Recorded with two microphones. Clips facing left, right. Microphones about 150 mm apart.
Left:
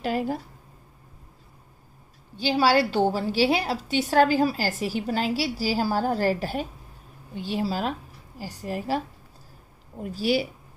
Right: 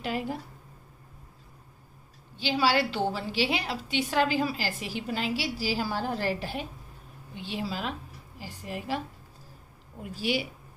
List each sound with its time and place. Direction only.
0.0 s a woman's voice: 40° left (ahead or behind)
2.6 s a woman's voice: 40° left (ahead or behind)